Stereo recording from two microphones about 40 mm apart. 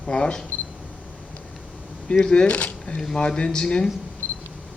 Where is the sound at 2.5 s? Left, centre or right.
Left.